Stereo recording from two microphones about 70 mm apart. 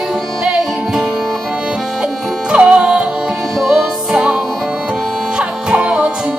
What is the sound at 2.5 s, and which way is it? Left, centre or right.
Music, centre.